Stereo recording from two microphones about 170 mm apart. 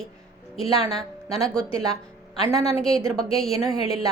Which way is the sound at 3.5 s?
20° right (ahead or behind).